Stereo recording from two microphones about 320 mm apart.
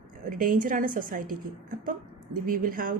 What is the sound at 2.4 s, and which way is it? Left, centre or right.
Speech, right.